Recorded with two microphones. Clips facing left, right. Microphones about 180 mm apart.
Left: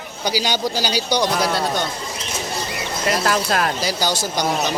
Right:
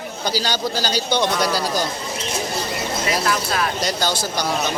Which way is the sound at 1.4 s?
Centre (ahead or behind).